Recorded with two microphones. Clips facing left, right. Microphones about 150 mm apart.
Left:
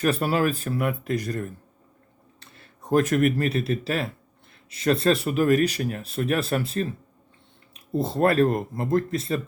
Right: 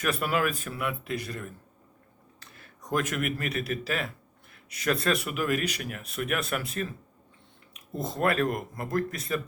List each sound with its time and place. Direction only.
0.0 s speech: 30° left (ahead or behind)
2.5 s speech: 30° left (ahead or behind)